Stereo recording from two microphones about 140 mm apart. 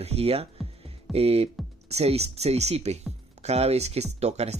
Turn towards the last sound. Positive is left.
turn(degrees=-50)  # may be behind; listen again after turning